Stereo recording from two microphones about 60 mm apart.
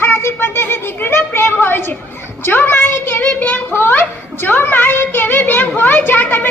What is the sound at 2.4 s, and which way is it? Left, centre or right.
Child singing, left.